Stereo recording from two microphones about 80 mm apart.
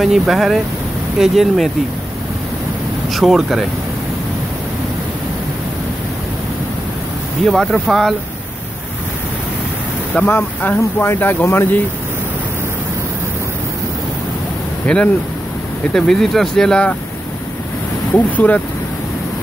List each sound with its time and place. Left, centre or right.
0.0 s speech: centre
3.1 s speech: centre
7.4 s speech: centre
10.3 s speech: left
14.8 s speech: centre
18.1 s speech: left